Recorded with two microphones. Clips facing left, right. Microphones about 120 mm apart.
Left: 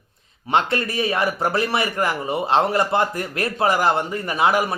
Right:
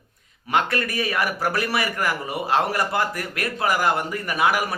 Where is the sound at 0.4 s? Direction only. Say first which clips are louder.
Left 2 dB; 25° left (ahead or behind).